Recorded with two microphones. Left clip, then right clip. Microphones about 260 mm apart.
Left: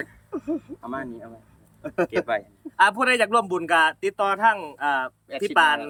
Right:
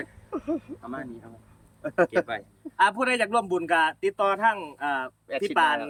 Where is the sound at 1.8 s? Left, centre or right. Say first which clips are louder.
Right 1 dB; centre.